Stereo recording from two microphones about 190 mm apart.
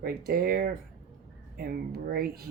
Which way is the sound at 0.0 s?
55° right (ahead or behind).